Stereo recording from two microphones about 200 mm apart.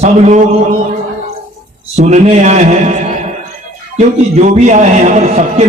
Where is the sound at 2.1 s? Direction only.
35° right (ahead or behind).